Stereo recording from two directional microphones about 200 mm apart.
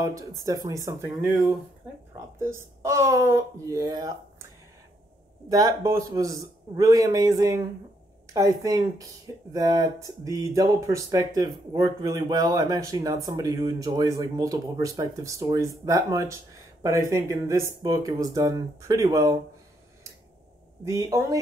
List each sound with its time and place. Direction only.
0.0 s speech: 15° right (ahead or behind)
5.5 s speech: 20° right (ahead or behind)
20.8 s speech: 15° right (ahead or behind)